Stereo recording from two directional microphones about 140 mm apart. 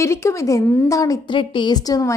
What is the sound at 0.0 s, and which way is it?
A woman's voice, 20° left (ahead or behind).